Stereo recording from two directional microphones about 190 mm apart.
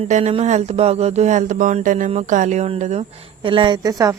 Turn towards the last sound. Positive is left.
turn(degrees=-20)  # may be behind; listen again after turning